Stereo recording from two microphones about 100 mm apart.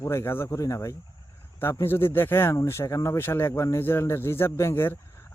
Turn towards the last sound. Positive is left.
turn(degrees=25)  # may be behind; listen again after turning